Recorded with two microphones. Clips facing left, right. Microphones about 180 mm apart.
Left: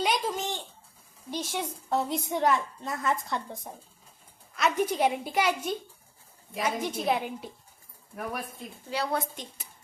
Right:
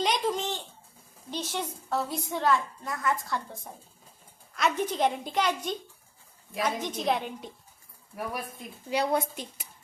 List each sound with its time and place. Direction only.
0.0 s a sound: 5° left (ahead or behind)
1.3 s a woman's voice: 10° left (ahead or behind)
4.7 s a child's voice: 10° left (ahead or behind)
8.9 s speech: 15° right (ahead or behind)